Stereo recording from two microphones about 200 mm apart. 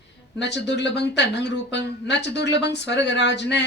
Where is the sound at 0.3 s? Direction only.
60° left (ahead or behind).